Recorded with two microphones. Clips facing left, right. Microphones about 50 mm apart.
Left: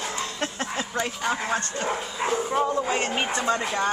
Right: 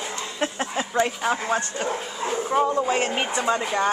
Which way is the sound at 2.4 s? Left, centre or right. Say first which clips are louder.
Right 3 dB; centre.